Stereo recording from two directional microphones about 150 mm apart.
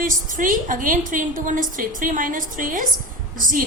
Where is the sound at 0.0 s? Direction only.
65° right (ahead or behind).